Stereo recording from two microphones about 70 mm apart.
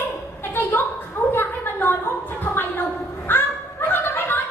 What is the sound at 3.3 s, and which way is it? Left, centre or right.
Fowl, left.